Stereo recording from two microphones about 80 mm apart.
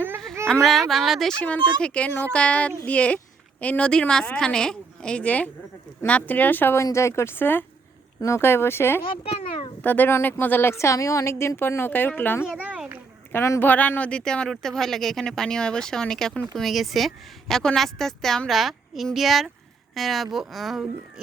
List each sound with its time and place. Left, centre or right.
0.6 s a woman's voice: centre
1.4 s speech: centre
13.7 s a woman's voice: left; by 20.8 s centre